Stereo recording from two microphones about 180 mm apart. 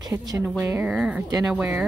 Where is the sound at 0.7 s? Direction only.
5° right (ahead or behind).